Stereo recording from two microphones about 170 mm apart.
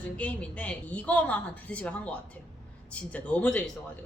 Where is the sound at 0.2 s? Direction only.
10° left (ahead or behind).